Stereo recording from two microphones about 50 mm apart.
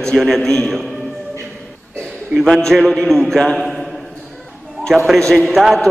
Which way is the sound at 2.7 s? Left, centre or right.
Centre.